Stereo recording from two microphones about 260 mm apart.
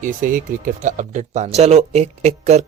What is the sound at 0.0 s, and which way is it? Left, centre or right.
Speech, right.